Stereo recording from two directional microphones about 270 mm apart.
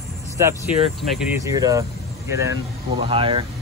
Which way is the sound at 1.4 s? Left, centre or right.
Centre.